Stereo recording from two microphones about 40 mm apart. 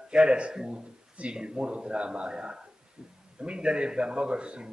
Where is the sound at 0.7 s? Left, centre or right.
Right.